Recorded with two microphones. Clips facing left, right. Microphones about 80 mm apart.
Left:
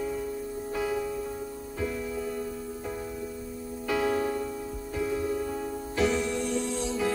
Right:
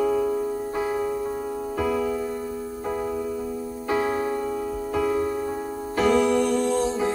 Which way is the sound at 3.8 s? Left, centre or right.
Right.